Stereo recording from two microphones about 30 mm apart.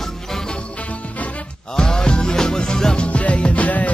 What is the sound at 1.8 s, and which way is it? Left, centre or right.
Music, left.